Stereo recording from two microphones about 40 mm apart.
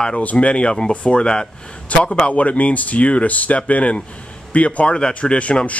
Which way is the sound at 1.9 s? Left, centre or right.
Left.